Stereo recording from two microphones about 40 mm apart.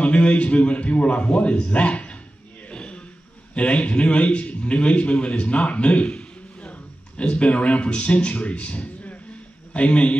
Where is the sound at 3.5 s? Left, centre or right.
Left.